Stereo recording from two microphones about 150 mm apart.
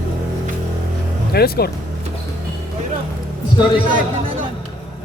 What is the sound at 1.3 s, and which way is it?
Speech, 90° left.